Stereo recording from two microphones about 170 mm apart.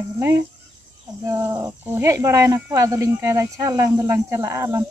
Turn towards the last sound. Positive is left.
turn(degrees=-15)  # may be behind; listen again after turning